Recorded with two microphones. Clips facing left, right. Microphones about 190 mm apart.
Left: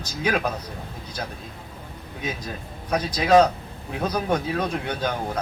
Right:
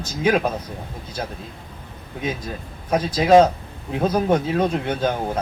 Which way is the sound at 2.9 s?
25° right (ahead or behind).